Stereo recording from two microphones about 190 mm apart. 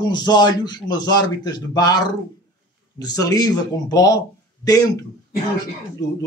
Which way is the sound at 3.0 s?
20° left (ahead or behind).